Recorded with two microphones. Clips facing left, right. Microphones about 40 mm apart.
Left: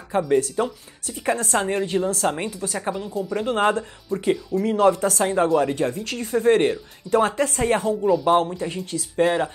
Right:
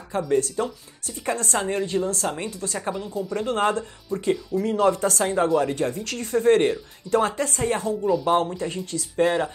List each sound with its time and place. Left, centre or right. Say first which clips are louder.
0.3 s a woman's voice: left 1 dB; centre
7.4 s speech: left 3 dB; left
8.1 s a woman's voice: left 2 dB; centre